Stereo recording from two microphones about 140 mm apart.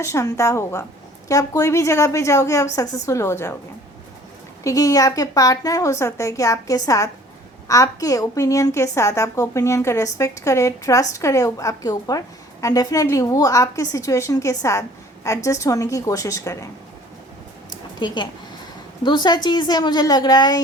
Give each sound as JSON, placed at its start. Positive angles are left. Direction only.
{"t": 0.0, "sound": "a woman's voice", "side_deg": 20}
{"t": 4.6, "sound": "a woman's voice", "side_deg": 25}
{"t": 18.0, "sound": "a woman's voice", "side_deg": 30}